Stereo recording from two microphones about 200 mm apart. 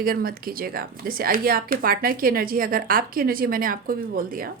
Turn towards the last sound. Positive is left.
turn(degrees=-45)  # may be behind; listen again after turning